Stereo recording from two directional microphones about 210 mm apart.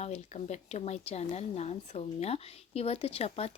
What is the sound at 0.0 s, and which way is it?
A woman's voice, 30° left (ahead or behind).